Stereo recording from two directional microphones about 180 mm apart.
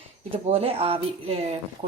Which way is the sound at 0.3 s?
30° right (ahead or behind).